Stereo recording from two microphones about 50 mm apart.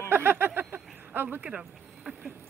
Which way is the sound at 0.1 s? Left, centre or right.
Right.